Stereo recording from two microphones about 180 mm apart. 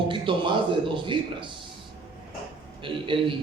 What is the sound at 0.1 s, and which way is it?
A man's voice, 25° right (ahead or behind).